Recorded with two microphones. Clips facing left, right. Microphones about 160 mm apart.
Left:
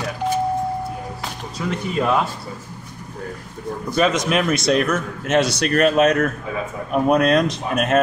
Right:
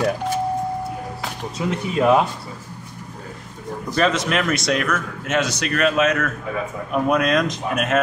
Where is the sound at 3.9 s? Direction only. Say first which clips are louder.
Left 1 dB; 10° left (ahead or behind).